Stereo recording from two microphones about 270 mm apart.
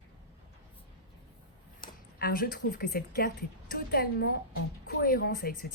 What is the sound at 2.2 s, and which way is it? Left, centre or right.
A woman's voice, left.